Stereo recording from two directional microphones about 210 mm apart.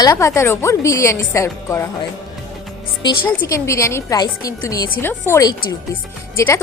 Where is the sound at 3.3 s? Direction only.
10° left (ahead or behind).